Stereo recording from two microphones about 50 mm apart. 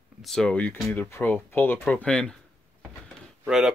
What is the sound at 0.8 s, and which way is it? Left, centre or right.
Speech, left.